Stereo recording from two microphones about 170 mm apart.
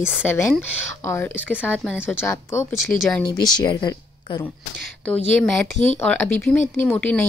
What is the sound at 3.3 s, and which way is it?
Speech, 25° left (ahead or behind).